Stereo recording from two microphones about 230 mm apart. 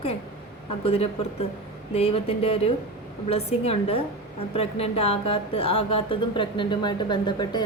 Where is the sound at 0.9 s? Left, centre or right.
Left.